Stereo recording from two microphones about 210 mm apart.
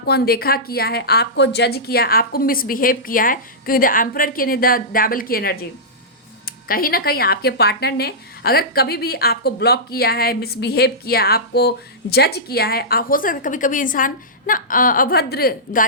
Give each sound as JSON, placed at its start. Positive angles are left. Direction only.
{"t": 0.0, "sound": "a woman's voice", "side_deg": 50}